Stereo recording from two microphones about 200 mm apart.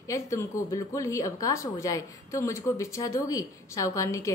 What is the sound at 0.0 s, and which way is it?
Speech, 15° left (ahead or behind).